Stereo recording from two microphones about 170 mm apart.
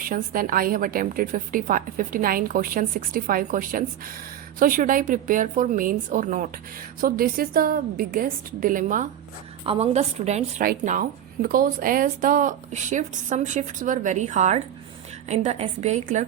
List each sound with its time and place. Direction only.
0.1 s a woman's voice: 55° right (ahead or behind)
9.6 s a woman's voice: 40° right (ahead or behind)
10.7 s a woman's voice: 50° right (ahead or behind)